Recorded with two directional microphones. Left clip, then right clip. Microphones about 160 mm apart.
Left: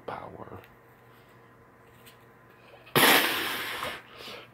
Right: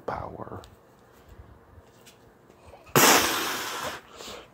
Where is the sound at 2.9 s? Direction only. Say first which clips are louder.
Right 2 dB; 20° right (ahead or behind).